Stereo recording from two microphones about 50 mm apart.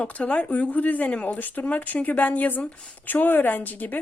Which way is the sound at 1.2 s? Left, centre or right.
Left.